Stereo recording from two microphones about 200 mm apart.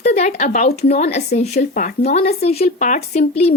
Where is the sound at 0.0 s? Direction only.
35° left (ahead or behind).